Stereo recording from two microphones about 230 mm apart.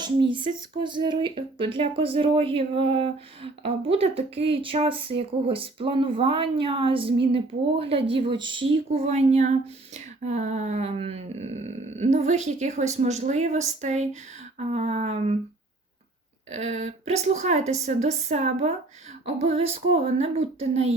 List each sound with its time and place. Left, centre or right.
0.3 s speech: right
16.5 s speech: right